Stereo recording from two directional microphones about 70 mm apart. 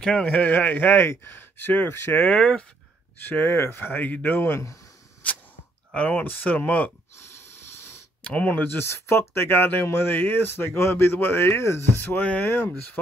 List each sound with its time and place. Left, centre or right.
0.0 s speech: centre
2.1 s speech: centre
3.3 s speech: left
5.9 s speech: left
7.2 s a sound: left
8.2 s speech: centre; by 11.8 s left
12.0 s speech: left